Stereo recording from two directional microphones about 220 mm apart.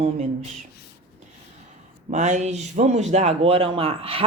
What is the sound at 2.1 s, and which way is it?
Speech, 35° right (ahead or behind).